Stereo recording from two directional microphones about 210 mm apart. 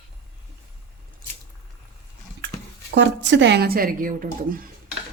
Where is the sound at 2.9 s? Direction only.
60° right (ahead or behind); by 4.6 s 40° right (ahead or behind).